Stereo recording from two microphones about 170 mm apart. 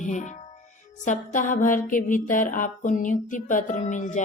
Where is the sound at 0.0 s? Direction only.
45° left (ahead or behind).